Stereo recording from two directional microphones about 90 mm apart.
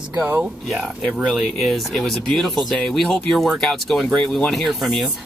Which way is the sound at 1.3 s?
Centre (ahead or behind).